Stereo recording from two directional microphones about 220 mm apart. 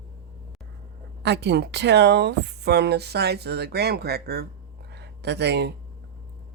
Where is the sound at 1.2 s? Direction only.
50° right (ahead or behind).